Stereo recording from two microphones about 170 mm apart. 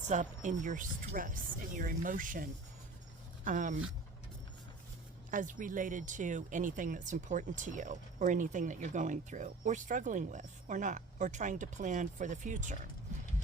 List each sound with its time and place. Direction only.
0.1 s speech: 45° right (ahead or behind)
5.3 s speech: 50° right (ahead or behind)